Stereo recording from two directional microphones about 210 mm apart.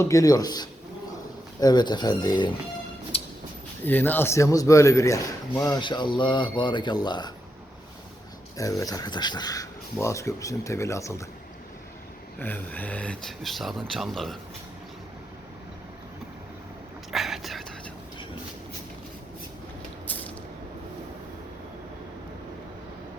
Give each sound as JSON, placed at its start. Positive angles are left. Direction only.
{"t": 0.0, "sound": "a man's voice", "side_deg": 15}
{"t": 3.1, "sound": "a sound", "side_deg": 30}
{"t": 3.8, "sound": "a man's voice", "side_deg": 10}
{"t": 8.5, "sound": "a man's voice", "side_deg": 15}
{"t": 12.4, "sound": "speech", "side_deg": 10}
{"t": 17.1, "sound": "a sound", "side_deg": 0}
{"t": 20.1, "sound": "creak", "side_deg": 10}